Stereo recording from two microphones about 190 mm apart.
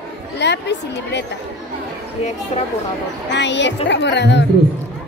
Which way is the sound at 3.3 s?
65° left (ahead or behind).